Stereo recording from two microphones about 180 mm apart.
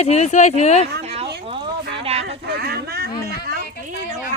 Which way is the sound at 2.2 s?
60° right (ahead or behind).